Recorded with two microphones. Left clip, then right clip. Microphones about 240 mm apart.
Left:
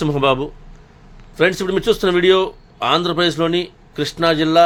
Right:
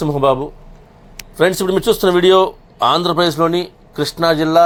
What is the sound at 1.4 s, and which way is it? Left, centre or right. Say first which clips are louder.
Speech: right 2 dB; centre.